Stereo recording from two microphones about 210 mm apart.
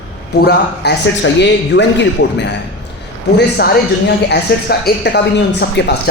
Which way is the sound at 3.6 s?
45° left (ahead or behind).